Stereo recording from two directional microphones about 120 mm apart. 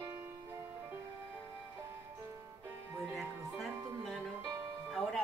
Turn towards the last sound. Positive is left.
turn(degrees=0)  # may be behind; listen again after turning